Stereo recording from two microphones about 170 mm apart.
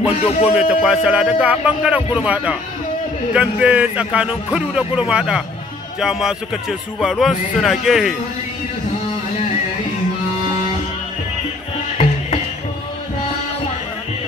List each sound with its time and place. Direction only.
0.1 s speech: 35° left (ahead or behind)
0.5 s a man's voice: 5° right (ahead or behind)